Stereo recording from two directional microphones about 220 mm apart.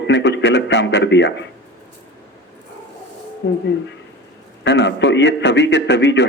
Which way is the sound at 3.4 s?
55° left (ahead or behind).